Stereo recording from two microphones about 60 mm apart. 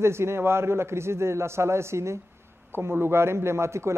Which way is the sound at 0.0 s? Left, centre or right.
Right.